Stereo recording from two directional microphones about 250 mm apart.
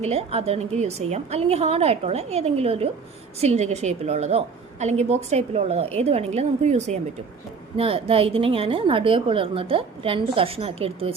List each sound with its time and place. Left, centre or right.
0.0 s a woman's voice: right